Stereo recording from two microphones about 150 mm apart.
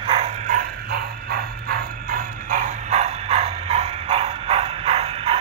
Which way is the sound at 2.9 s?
45° right (ahead or behind).